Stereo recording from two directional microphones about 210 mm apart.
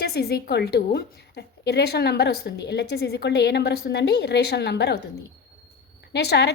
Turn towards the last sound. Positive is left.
turn(degrees=50)  # may be behind; listen again after turning